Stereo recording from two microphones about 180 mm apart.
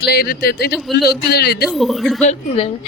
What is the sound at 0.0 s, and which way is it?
Speech, 60° left (ahead or behind).